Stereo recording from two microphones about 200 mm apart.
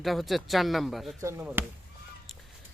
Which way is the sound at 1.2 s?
10° right (ahead or behind).